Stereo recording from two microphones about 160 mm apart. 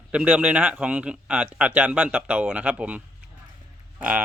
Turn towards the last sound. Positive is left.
turn(degrees=-10)  # may be behind; listen again after turning